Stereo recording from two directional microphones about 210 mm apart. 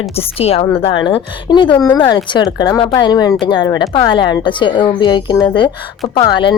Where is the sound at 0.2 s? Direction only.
30° left (ahead or behind).